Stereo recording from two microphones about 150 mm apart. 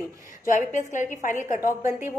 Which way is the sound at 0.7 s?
55° left (ahead or behind).